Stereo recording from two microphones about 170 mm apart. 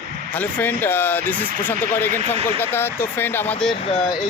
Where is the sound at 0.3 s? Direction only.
10° left (ahead or behind).